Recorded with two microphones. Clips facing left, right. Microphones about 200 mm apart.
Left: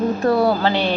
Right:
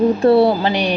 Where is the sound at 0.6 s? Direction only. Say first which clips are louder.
Right 1 dB; 15° right (ahead or behind).